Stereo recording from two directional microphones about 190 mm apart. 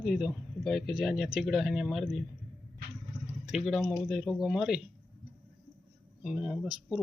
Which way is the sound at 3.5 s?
5° right (ahead or behind).